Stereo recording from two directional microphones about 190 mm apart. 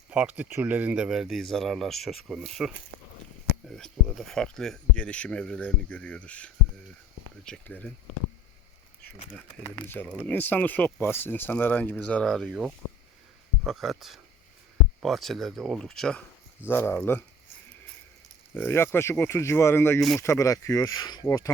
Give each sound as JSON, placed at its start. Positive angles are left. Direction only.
{"t": 0.1, "sound": "speech", "side_deg": -10}
{"t": 9.7, "sound": "speech", "side_deg": 10}
{"t": 15.0, "sound": "speech", "side_deg": 0}
{"t": 18.5, "sound": "speech", "side_deg": 10}